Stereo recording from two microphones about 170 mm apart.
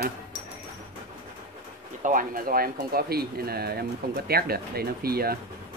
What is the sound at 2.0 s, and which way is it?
Speech, 50° right (ahead or behind).